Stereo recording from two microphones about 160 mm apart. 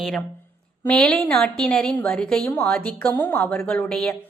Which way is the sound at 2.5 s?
15° left (ahead or behind).